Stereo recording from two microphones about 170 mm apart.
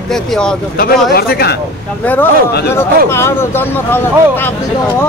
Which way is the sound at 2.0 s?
10° left (ahead or behind).